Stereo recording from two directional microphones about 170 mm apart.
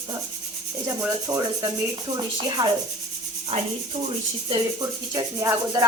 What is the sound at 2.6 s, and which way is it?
Speech, 20° right (ahead or behind).